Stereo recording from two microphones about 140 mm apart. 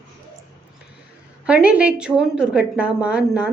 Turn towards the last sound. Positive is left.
turn(degrees=-10)  # may be behind; listen again after turning